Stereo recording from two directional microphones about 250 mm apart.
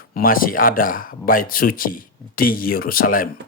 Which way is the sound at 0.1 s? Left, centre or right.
Left.